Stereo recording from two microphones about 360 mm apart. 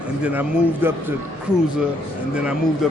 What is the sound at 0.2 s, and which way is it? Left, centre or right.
Speech, centre.